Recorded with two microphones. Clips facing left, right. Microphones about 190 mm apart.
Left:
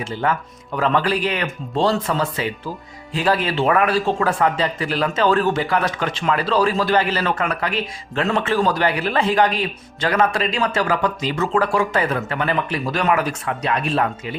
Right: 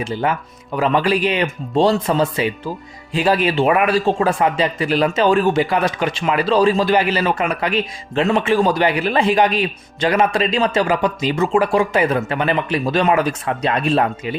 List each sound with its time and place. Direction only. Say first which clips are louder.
0.0 s speech: right 2 dB; 15° right (ahead or behind)